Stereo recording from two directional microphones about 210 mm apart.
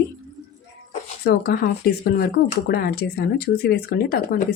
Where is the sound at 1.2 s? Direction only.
50° left (ahead or behind).